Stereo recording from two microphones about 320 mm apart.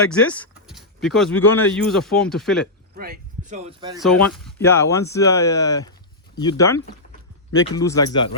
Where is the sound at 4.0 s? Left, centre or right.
Centre.